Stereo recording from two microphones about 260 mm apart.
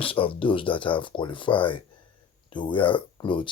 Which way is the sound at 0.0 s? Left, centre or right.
Left.